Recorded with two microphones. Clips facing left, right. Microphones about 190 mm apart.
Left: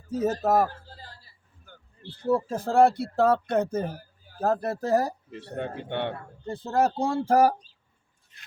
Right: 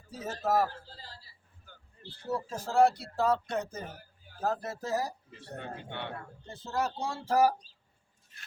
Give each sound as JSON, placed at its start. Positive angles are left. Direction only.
{"t": 0.1, "sound": "a man's voice", "side_deg": 45}
{"t": 1.7, "sound": "a sound", "side_deg": 55}
{"t": 2.2, "sound": "speech", "side_deg": 55}